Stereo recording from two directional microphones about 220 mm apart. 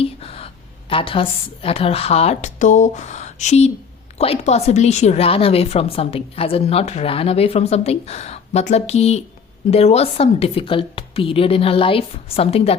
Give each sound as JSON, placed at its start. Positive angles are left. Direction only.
{"t": 0.0, "sound": "a woman's voice", "side_deg": 25}